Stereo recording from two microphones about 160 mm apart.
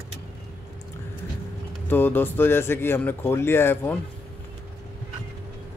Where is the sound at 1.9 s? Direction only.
10° left (ahead or behind).